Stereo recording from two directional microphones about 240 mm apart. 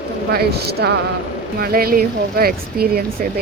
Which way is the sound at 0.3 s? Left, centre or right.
Right.